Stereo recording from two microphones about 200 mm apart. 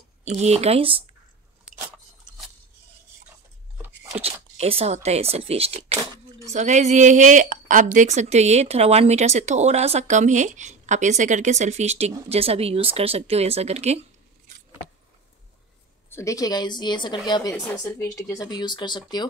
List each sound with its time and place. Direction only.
0.2 s speech: 35° right (ahead or behind)
3.7 s a sound: 10° right (ahead or behind)
4.2 s speech: 30° right (ahead or behind)
16.1 s speech: 15° left (ahead or behind)